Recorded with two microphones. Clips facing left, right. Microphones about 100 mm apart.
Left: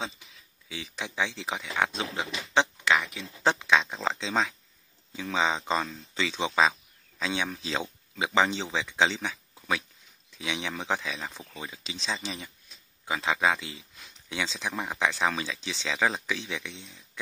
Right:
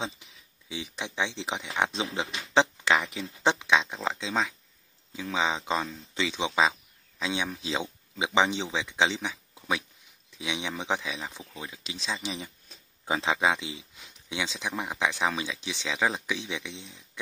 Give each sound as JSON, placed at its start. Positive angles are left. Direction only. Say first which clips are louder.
{"t": 0.7, "sound": "speech", "louder": "right 1 dB", "side_deg": -15}
{"t": 13.1, "sound": "speech", "louder": "right 1 dB", "side_deg": -25}